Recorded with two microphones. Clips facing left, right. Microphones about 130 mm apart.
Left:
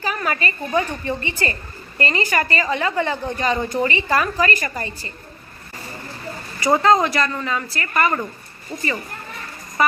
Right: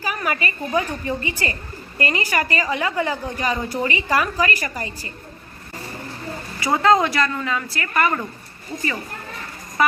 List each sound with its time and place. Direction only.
0.0 s a woman's voice: 10° right (ahead or behind)
6.6 s a woman's voice: centre (ahead or behind)